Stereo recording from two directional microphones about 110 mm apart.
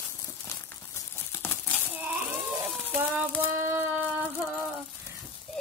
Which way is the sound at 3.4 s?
25° right (ahead or behind).